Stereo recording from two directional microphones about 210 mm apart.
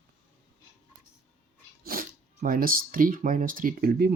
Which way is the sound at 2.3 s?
40° right (ahead or behind).